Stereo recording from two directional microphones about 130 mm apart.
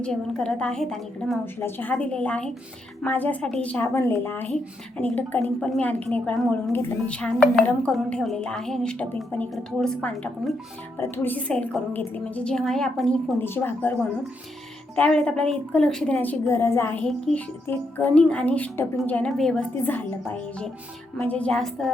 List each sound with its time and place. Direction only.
0.0 s a woman's voice: 5° left (ahead or behind)
1.5 s a woman's voice: 15° left (ahead or behind)
13.4 s a woman's voice: 15° left (ahead or behind)
16.2 s a woman's voice: 15° left (ahead or behind)
19.7 s a woman's voice: 15° left (ahead or behind)